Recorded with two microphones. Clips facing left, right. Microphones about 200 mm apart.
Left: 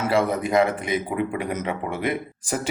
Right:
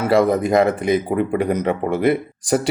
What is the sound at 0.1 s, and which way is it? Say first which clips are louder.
Speech: right 6 dB; 40° right (ahead or behind).